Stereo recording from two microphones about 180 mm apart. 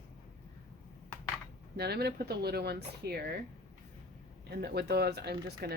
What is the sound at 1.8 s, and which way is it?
Speech, 60° right (ahead or behind).